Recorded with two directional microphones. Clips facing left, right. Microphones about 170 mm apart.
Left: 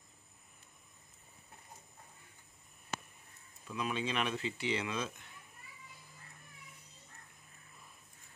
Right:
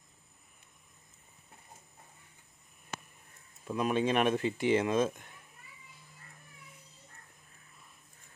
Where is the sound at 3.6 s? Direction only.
50° right (ahead or behind).